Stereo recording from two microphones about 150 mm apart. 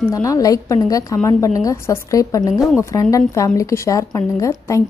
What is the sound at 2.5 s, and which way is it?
Speech, 5° right (ahead or behind).